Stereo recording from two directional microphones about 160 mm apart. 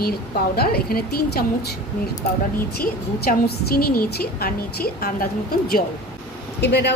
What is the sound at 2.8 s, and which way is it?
A woman's voice, 70° left (ahead or behind).